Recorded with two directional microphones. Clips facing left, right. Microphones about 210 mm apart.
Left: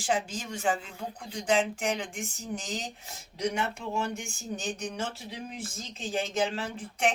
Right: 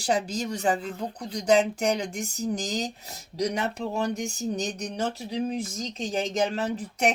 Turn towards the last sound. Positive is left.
turn(degrees=-40)  # may be behind; listen again after turning